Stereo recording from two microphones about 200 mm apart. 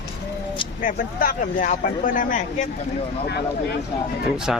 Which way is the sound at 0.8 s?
45° left (ahead or behind).